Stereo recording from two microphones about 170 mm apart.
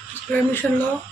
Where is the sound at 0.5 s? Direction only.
10° left (ahead or behind).